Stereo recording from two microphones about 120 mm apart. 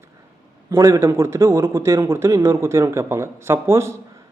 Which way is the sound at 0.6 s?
25° right (ahead or behind).